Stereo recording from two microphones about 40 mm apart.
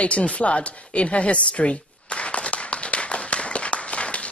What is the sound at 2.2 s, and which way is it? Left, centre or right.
Clapping, left.